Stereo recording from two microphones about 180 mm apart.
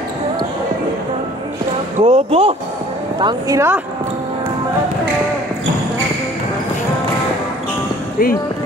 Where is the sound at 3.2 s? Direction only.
20° right (ahead or behind).